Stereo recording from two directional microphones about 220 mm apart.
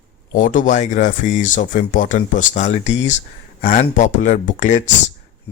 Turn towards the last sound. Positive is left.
turn(degrees=35)  # may be behind; listen again after turning